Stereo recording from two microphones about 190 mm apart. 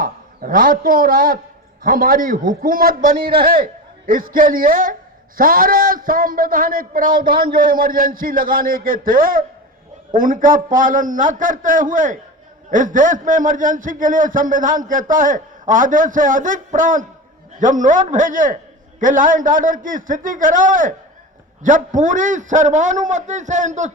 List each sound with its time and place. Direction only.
0.0 s a man's voice: 45° right (ahead or behind)